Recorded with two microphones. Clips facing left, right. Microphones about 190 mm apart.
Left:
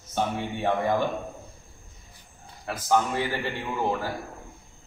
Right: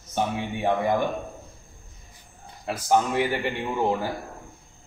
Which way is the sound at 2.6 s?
15° right (ahead or behind).